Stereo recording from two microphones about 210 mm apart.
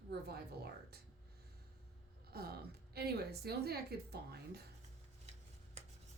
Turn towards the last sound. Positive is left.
turn(degrees=-50)  # may be behind; listen again after turning